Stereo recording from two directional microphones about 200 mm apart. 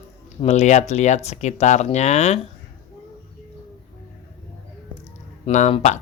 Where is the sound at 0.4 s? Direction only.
35° left (ahead or behind).